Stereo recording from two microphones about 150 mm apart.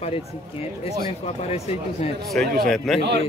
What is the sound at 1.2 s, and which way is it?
Speech, 45° left (ahead or behind).